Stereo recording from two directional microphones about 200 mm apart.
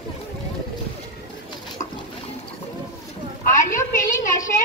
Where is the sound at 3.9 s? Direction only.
40° left (ahead or behind).